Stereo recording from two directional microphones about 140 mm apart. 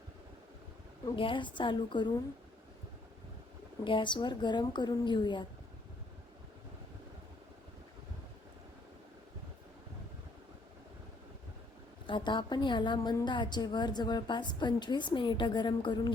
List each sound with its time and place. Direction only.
1.1 s a woman's voice: 40° left (ahead or behind)
3.8 s a woman's voice: 35° left (ahead or behind)
12.0 s a woman's voice: 35° left (ahead or behind)